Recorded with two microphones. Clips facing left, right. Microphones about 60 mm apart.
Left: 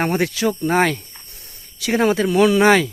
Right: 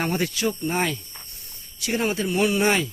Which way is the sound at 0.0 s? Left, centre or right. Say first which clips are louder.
Left 5 dB; left.